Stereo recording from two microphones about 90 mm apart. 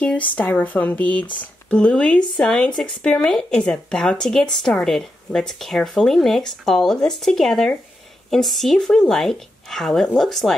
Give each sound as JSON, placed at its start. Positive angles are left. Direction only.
{"t": 0.4, "sound": "speech", "side_deg": 15}